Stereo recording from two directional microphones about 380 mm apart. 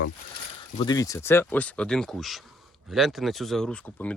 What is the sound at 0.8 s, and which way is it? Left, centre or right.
Speech, centre.